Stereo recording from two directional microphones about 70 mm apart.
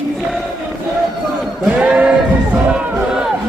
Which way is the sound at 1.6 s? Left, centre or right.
Centre.